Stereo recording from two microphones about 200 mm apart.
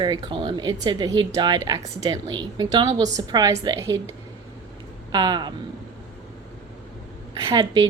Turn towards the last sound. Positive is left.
turn(degrees=-20)  # may be behind; listen again after turning